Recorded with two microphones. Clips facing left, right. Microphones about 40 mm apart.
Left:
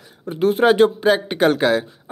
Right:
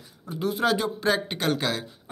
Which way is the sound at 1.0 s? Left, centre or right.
Centre.